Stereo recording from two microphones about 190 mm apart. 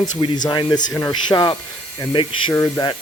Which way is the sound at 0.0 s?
25° left (ahead or behind).